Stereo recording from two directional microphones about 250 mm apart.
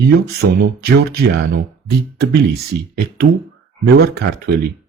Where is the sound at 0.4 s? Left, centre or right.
Right.